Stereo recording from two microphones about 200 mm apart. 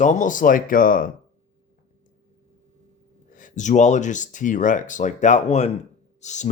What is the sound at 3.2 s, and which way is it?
Speech, 40° left (ahead or behind).